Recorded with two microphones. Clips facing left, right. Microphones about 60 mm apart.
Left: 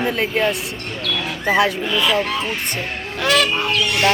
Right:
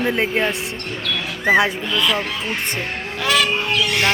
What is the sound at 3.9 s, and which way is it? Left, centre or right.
Speech, right.